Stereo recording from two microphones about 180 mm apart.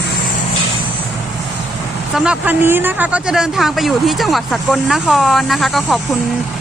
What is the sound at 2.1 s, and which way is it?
Speech, 5° right (ahead or behind).